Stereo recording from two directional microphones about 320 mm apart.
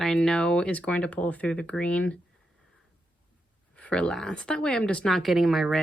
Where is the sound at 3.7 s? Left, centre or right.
Centre.